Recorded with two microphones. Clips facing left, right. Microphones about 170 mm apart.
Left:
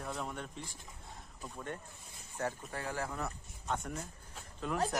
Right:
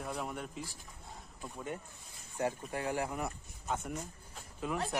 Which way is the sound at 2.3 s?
15° right (ahead or behind).